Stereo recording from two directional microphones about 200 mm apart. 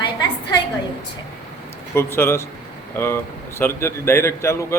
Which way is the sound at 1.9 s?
10° left (ahead or behind).